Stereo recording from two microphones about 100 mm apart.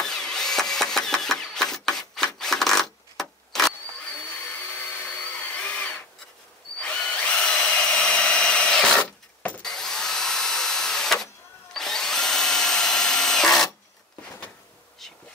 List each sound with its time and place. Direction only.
0.0 s drill: 5° left (ahead or behind)
2.3 s vehicle: 5° left (ahead or behind)
4.5 s tools: 15° left (ahead or behind)
6.8 s drill: 10° left (ahead or behind)